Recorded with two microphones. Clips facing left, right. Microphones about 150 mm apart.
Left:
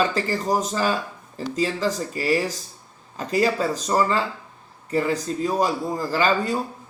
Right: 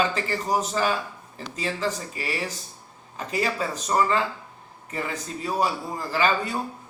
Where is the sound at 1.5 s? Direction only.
40° left (ahead or behind).